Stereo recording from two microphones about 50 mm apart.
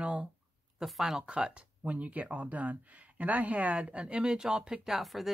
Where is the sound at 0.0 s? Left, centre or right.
Right.